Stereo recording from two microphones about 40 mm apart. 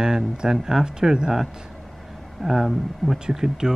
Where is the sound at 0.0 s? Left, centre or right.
Centre.